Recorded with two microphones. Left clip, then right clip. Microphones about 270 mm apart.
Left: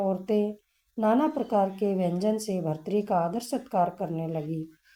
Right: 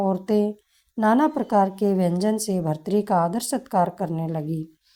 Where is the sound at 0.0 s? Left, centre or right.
Right.